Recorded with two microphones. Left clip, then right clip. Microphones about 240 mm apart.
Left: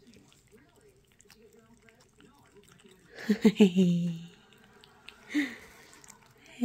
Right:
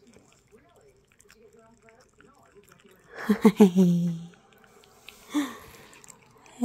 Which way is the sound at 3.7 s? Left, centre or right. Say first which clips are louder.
Right 4 dB; right.